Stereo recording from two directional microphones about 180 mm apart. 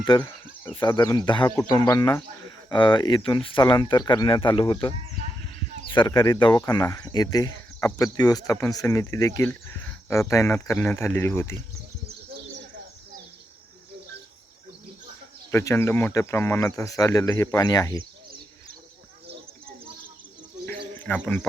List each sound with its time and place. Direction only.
0.0 s speech: 25° left (ahead or behind)
15.5 s speech: 15° left (ahead or behind)
20.7 s a sound: 10° left (ahead or behind)